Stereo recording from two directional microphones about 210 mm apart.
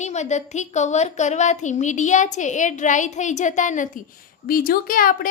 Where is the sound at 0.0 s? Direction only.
35° left (ahead or behind).